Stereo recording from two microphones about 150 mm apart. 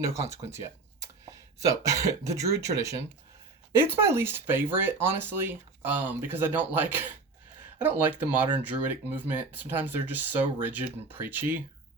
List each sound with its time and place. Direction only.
0.0 s speech: 20° right (ahead or behind)